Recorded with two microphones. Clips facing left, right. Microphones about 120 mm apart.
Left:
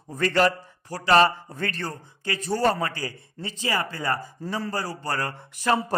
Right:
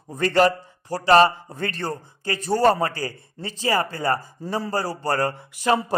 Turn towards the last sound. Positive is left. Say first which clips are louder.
# right 3 dB
turn(degrees=-15)  # may be behind; listen again after turning